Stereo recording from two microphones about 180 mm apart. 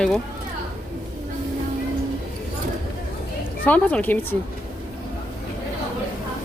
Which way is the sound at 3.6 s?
10° left (ahead or behind).